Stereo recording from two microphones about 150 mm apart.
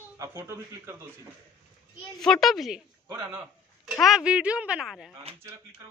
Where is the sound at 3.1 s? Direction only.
15° right (ahead or behind).